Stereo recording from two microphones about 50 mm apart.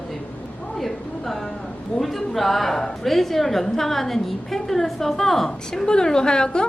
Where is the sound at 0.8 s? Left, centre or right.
Centre.